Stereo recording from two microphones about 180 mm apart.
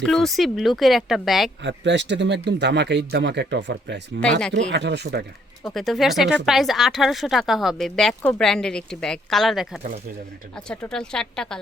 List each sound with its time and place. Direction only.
0.0 s speech: 5° left (ahead or behind)
1.6 s speech: 80° right
4.2 s speech: 5° left (ahead or behind)
4.5 s speech: 75° right (ahead or behind)
5.6 s speech: centre (ahead or behind)